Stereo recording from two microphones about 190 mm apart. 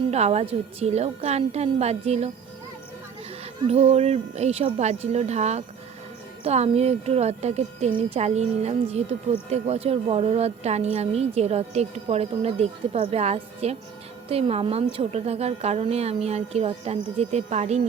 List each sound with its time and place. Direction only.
0.1 s a woman's voice: 35° right (ahead or behind)
3.4 s a woman's voice: 35° right (ahead or behind)